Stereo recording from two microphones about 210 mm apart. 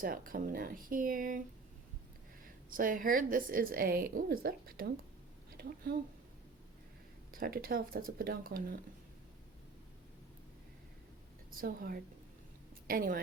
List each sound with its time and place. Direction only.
0.0 s a woman's voice: 40° right (ahead or behind)
2.4 s a woman's voice: 40° right (ahead or behind)
7.3 s speech: 45° right (ahead or behind)
11.5 s a woman's voice: 45° right (ahead or behind)